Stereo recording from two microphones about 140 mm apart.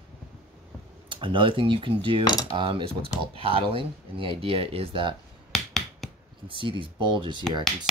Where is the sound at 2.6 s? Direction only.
35° right (ahead or behind).